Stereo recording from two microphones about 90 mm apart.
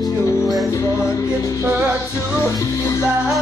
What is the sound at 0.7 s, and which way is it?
Music, 40° left (ahead or behind).